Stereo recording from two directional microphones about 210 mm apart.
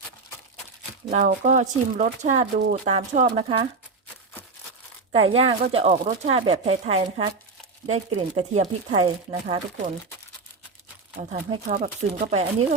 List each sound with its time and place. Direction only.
1.1 s speech: 35° right (ahead or behind)
5.1 s speech: 25° right (ahead or behind)
11.2 s speech: 30° right (ahead or behind)